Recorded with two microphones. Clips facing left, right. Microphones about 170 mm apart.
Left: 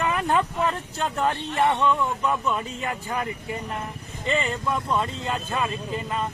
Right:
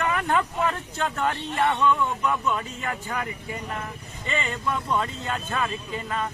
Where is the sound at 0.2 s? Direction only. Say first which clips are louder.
Left 1 dB; 30° left (ahead or behind).